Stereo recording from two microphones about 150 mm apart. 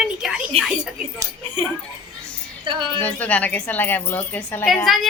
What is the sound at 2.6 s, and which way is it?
Speech, 35° right (ahead or behind).